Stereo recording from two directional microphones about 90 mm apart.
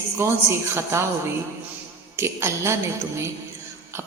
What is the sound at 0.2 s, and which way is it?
Speech, 30° right (ahead or behind).